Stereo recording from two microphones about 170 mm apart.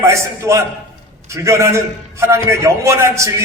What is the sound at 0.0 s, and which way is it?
A man's voice, 15° right (ahead or behind).